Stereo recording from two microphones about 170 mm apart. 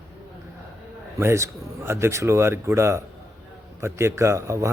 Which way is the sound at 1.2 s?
15° right (ahead or behind).